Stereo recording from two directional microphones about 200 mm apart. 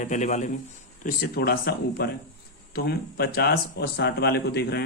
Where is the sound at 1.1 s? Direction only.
50° left (ahead or behind).